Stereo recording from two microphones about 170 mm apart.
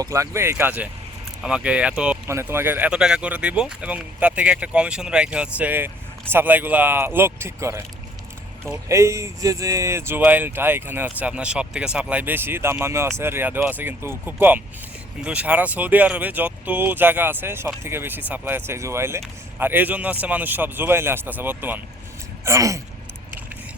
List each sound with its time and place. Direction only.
0.0 s speech: 15° right (ahead or behind)
8.9 s speech: 15° right (ahead or behind)